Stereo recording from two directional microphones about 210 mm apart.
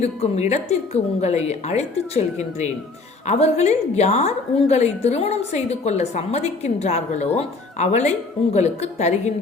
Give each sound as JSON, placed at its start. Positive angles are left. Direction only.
{"t": 0.0, "sound": "a woman's voice", "side_deg": 30}